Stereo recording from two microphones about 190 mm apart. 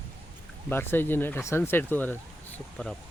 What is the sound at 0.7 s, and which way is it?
Speech, 10° left (ahead or behind).